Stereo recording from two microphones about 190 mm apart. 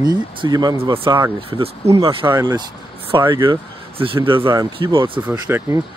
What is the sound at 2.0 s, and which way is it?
Speech, 20° right (ahead or behind).